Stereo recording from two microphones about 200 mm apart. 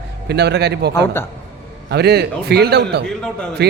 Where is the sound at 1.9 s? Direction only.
55° right (ahead or behind).